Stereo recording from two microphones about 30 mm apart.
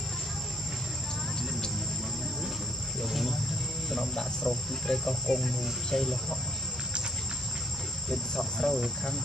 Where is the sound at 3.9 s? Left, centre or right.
Centre.